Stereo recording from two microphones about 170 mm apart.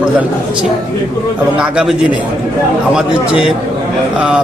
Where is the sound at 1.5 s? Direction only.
5° right (ahead or behind).